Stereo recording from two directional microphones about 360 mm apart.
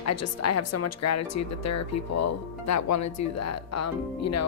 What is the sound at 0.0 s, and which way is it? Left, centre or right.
Speech, left.